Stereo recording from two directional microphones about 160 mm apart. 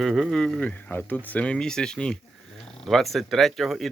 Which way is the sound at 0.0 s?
Centre (ahead or behind).